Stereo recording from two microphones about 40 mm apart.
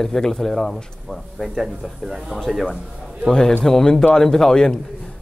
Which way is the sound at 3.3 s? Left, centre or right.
Centre.